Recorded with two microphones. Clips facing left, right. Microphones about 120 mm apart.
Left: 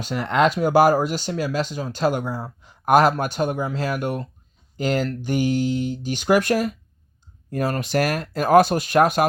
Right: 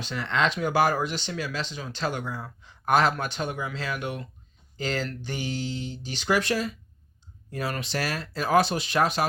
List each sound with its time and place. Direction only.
0.0 s speech: 45° left (ahead or behind)